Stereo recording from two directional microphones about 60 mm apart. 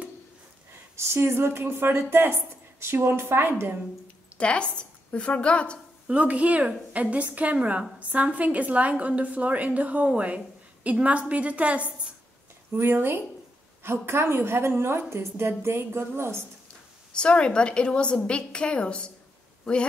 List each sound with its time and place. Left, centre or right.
0.9 s speech: right
4.4 s a woman's voice: centre
6.0 s a woman's voice: right
12.7 s speech: right
17.1 s a woman's voice: centre